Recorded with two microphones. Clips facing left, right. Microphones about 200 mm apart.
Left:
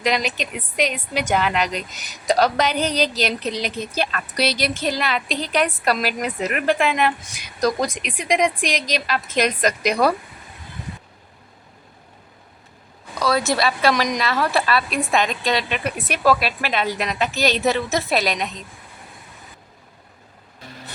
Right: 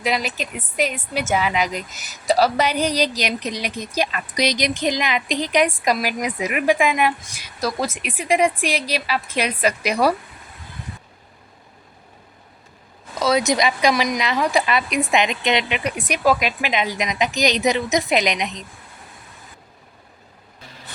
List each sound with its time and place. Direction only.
0.0 s a woman's voice: 5° right (ahead or behind)
13.1 s a woman's voice: 20° right (ahead or behind)
13.9 s a woman's voice: 5° right (ahead or behind)